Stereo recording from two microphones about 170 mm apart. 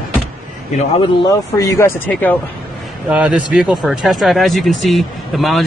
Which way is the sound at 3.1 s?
10° right (ahead or behind).